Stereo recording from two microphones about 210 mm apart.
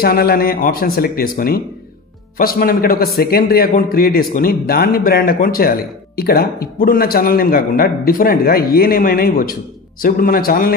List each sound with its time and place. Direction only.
0.0 s a man's voice: 45° left (ahead or behind)